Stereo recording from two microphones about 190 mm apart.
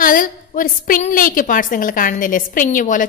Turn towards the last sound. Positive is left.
turn(degrees=45)  # may be behind; listen again after turning